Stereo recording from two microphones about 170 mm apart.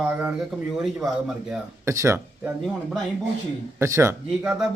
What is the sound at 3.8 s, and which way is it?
Speech, 15° right (ahead or behind).